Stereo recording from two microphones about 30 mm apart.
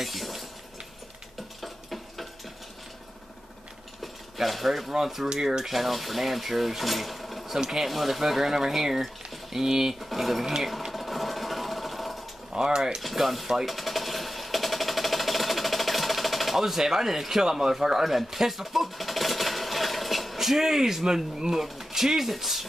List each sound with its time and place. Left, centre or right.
0.0 s a sound: centre
1.6 s a sound: centre
4.0 s a sound: centre
4.9 s speech: centre
5.7 s speech: centre
9.9 s speech: centre
10.4 s speech: centre
10.9 s engine: centre
12.5 s speech: right
13.0 s speech: centre
13.7 s a sound: centre
20.3 s speech: centre